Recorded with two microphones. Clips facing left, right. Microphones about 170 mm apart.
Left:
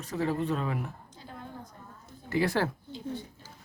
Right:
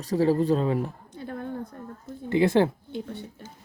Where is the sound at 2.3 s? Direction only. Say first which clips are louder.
Right 7 dB; 20° right (ahead or behind).